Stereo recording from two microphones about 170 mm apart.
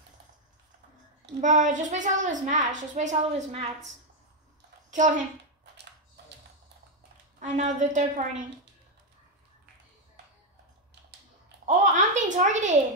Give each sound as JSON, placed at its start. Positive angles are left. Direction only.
{"t": 1.4, "sound": "a woman's voice", "side_deg": -45}
{"t": 4.9, "sound": "a woman's voice", "side_deg": -50}
{"t": 7.3, "sound": "a woman's voice", "side_deg": -45}
{"t": 11.6, "sound": "a child's voice", "side_deg": -45}